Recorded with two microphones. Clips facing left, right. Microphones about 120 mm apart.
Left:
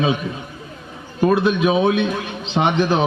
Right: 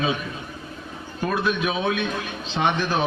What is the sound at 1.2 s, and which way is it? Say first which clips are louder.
A man's voice: left 8 dB; 20° left (ahead or behind).